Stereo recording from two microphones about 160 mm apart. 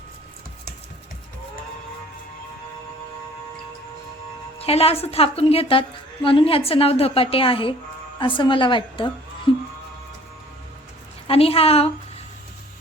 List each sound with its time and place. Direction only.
4.5 s a woman's voice: 40° left (ahead or behind)
9.5 s music: 30° left (ahead or behind)
11.3 s a woman's voice: 35° left (ahead or behind)